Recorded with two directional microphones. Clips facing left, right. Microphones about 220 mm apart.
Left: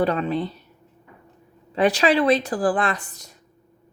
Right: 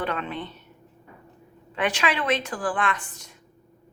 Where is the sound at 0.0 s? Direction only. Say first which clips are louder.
Left 8 dB; 35° left (ahead or behind).